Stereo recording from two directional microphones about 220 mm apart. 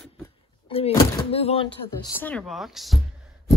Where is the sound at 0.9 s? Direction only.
15° left (ahead or behind).